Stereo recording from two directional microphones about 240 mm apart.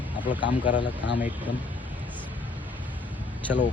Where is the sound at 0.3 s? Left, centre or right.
Centre.